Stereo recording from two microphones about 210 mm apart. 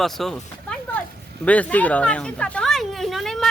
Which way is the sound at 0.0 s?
Centre (ahead or behind).